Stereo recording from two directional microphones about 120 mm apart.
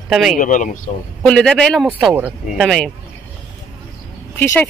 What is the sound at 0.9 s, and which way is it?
Speech, 70° left (ahead or behind).